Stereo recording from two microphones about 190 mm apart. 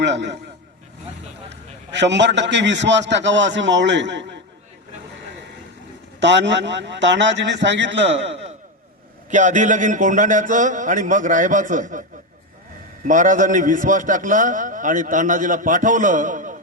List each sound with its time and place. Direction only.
0.0 s a man's voice: 65° right (ahead or behind)
1.9 s a man's voice: 65° right (ahead or behind)
6.1 s a man's voice: 70° right (ahead or behind)
9.3 s a man's voice: 40° right (ahead or behind)
13.1 s a man's voice: 40° right (ahead or behind)